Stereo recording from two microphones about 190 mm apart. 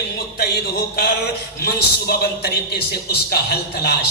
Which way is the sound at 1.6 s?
55° left (ahead or behind).